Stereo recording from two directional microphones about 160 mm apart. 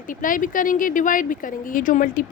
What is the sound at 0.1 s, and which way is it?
A woman's voice, 55° left (ahead or behind).